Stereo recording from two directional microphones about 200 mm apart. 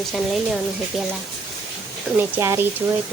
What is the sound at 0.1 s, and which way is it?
Speech, centre (ahead or behind).